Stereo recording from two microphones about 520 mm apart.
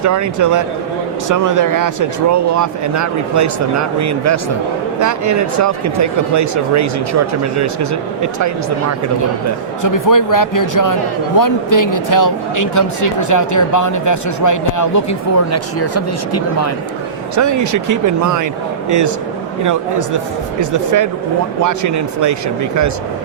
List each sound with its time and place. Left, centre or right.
0.0 s speech: right
9.8 s speech: left
17.3 s speech: right
20.6 s speech: right